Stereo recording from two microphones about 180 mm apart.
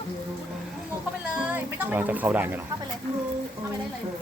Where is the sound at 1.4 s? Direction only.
10° right (ahead or behind).